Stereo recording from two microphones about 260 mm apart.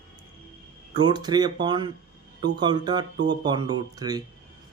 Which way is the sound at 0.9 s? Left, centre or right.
Centre.